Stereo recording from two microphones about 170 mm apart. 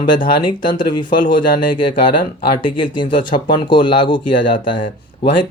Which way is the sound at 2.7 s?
30° left (ahead or behind).